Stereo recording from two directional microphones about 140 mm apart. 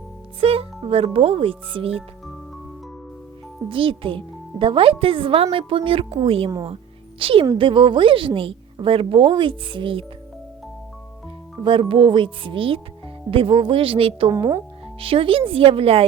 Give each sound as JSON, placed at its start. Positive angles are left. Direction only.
{"t": 0.3, "sound": "speech", "side_deg": -45}
{"t": 3.7, "sound": "speech", "side_deg": -40}
{"t": 11.6, "sound": "speech", "side_deg": -35}